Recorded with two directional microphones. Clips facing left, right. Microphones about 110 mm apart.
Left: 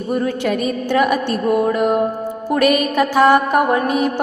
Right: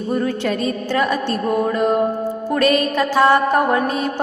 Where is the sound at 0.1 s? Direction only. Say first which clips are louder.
Left 2 dB; 15° left (ahead or behind).